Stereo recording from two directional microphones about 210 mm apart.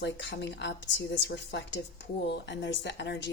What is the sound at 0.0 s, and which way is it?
A woman's voice, 55° left (ahead or behind).